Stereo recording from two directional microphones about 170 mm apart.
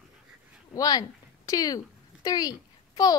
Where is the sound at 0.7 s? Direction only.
20° left (ahead or behind).